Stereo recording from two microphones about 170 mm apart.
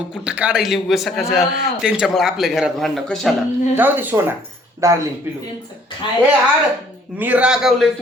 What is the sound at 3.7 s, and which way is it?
Speech, 10° right (ahead or behind).